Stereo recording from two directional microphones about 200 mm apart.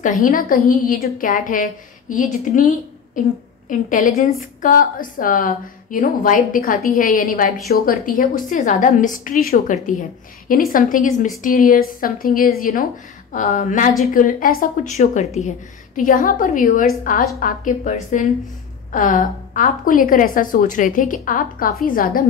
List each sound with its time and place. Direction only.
0.0 s a woman's voice: 45° left (ahead or behind)